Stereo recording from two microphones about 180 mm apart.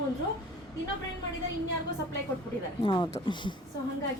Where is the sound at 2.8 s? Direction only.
25° left (ahead or behind).